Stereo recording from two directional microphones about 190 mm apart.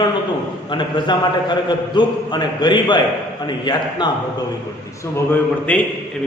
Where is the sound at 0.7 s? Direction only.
25° left (ahead or behind).